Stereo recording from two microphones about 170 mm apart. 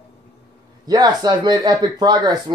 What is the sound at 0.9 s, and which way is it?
Speech, 25° right (ahead or behind).